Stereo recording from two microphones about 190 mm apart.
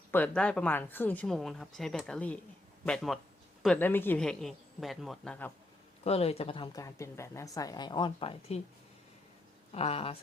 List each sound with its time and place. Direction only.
0.1 s speech: 10° left (ahead or behind)
6.1 s a woman's voice: 30° left (ahead or behind)
9.7 s speech: 30° left (ahead or behind)